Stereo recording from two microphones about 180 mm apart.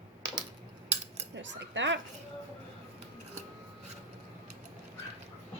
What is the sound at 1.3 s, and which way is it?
Speech, 90° right.